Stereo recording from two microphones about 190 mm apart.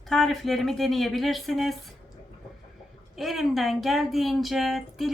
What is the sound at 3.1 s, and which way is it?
A woman's voice, centre (ahead or behind).